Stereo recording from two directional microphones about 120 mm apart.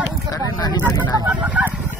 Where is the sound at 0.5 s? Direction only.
35° left (ahead or behind).